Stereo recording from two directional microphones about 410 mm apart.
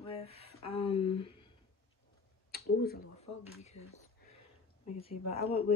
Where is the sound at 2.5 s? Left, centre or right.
Left.